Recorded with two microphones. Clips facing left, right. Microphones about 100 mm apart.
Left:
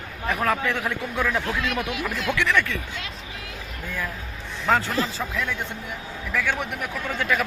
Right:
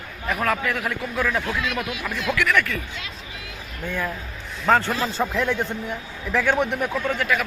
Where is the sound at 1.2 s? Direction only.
Centre (ahead or behind).